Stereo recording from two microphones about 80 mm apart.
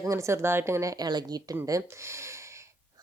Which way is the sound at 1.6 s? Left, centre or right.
Right.